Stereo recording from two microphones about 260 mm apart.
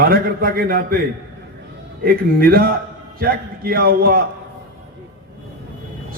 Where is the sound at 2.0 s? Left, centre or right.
Right.